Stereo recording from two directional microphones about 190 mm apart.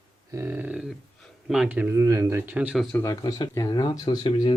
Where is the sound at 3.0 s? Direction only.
20° left (ahead or behind).